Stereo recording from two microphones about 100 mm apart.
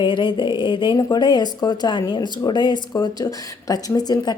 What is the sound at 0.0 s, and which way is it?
Speech, 50° left (ahead or behind).